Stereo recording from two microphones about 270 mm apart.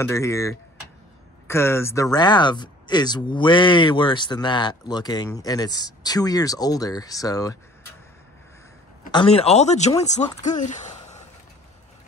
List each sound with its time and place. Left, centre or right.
0.0 s speech: centre
9.1 s speech: left
10.4 s a sound: left